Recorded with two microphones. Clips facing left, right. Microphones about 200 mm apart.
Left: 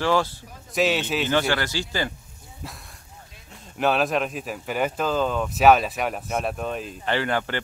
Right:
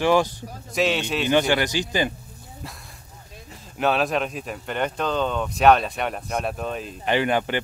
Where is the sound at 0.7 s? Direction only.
Centre (ahead or behind).